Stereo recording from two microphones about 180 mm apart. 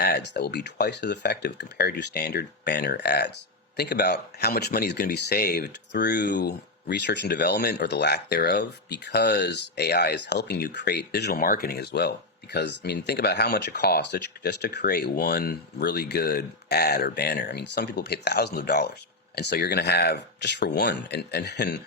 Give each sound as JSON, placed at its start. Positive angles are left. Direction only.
{"t": 0.0, "sound": "speech", "side_deg": 65}